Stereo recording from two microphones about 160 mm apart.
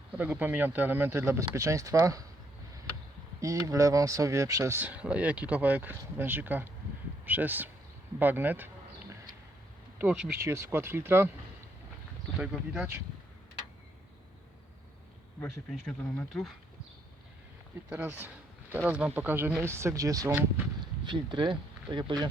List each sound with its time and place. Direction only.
0.1 s speech: 10° right (ahead or behind)
3.4 s speech: 20° right (ahead or behind)
8.2 s a sound: 10° right (ahead or behind)
10.0 s speech: 5° right (ahead or behind)
10.4 s speech: 15° right (ahead or behind)
12.4 s speech: 5° right (ahead or behind)
15.7 s speech: 5° left (ahead or behind)
17.8 s speech: 10° right (ahead or behind); by 22.3 s 30° right (ahead or behind)